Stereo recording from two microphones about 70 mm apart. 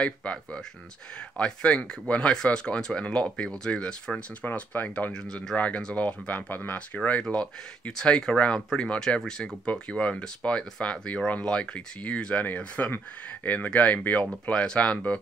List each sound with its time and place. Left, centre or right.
0.0 s speech: centre